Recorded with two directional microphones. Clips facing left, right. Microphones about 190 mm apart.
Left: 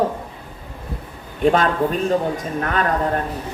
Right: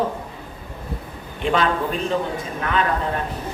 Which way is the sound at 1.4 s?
45° left (ahead or behind).